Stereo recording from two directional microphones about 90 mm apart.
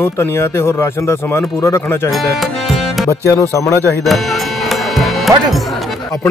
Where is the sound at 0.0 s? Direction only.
25° left (ahead or behind).